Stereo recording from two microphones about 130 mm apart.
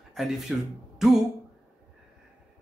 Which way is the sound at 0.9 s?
5° right (ahead or behind).